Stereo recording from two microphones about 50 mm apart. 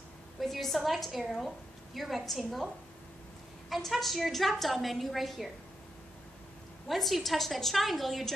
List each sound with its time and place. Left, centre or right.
0.4 s a woman's voice: centre
3.7 s a woman's voice: centre
6.9 s a woman's voice: centre